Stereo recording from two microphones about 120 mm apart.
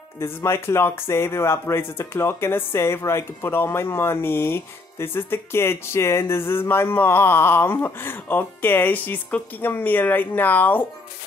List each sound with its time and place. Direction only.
0.2 s speech: 20° left (ahead or behind)